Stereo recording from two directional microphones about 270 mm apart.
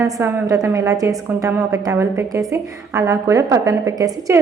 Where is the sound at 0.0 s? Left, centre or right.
Centre.